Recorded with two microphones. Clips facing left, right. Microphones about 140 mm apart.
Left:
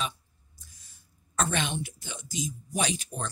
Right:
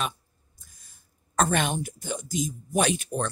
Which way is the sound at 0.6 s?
50° right (ahead or behind).